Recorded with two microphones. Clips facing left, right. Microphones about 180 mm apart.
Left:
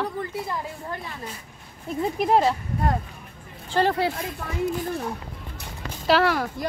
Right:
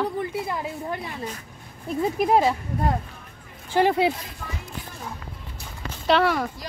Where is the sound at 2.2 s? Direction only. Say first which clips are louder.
Even; centre (ahead or behind).